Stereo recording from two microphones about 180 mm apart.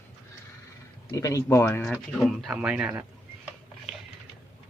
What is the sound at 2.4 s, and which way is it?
Speech, 5° right (ahead or behind).